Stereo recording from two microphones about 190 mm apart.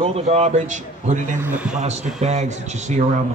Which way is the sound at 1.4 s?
10° right (ahead or behind).